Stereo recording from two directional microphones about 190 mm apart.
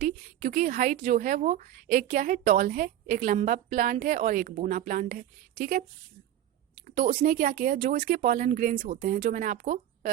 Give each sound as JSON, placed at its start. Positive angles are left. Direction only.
{"t": 0.0, "sound": "a woman's voice", "side_deg": -45}
{"t": 6.8, "sound": "a woman's voice", "side_deg": -45}